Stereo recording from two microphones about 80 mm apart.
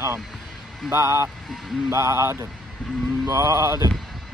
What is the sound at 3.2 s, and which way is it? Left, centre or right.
Music, right.